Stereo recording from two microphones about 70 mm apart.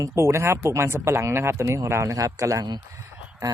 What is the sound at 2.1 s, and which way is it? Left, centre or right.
Speech, right.